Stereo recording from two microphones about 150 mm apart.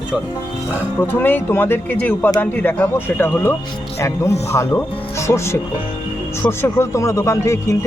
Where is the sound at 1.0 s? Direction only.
15° left (ahead or behind).